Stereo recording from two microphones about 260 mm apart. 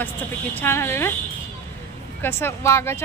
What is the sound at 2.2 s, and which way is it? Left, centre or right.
Speech, centre.